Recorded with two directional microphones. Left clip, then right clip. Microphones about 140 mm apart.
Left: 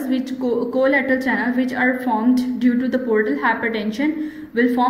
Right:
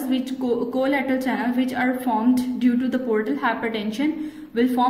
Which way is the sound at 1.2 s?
30° right (ahead or behind).